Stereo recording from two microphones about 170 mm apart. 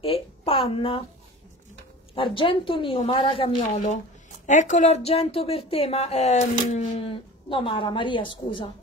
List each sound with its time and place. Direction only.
0.0 s a sound: 30° left (ahead or behind)
2.1 s speech: 30° left (ahead or behind)
3.6 s a woman's voice: 45° left (ahead or behind)